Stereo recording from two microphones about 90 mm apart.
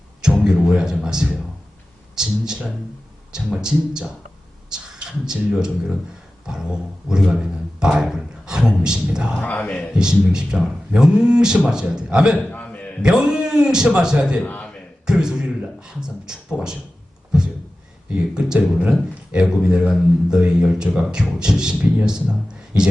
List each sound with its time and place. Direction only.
0.2 s a sound: 10° right (ahead or behind)
0.6 s speech: 5° right (ahead or behind)
7.1 s a man's voice: 5° right (ahead or behind)
9.4 s a man's voice: 20° left (ahead or behind)
10.0 s speech: 10° right (ahead or behind)
12.5 s a sound: 15° left (ahead or behind)
13.0 s speech: 10° right (ahead or behind)
14.4 s a sound: 15° left (ahead or behind)
15.0 s speech: 10° right (ahead or behind)
18.1 s speech: 10° right (ahead or behind)